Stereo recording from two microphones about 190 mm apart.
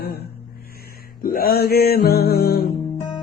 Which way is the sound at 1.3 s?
55° left (ahead or behind).